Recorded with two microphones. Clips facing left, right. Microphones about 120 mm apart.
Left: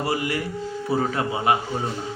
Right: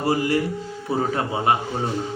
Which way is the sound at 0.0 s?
30° right (ahead or behind).